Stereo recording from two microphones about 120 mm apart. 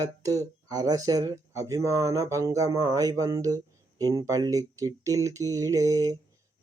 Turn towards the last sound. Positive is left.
turn(degrees=-30)  # may be behind; listen again after turning